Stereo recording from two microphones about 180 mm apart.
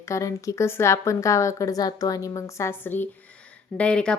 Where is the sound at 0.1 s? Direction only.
15° left (ahead or behind).